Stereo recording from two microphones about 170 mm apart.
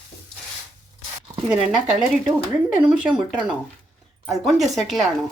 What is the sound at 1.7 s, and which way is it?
A woman's voice, centre (ahead or behind).